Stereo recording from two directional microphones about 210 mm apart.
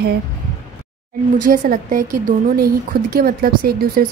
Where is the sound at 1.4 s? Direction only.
40° right (ahead or behind).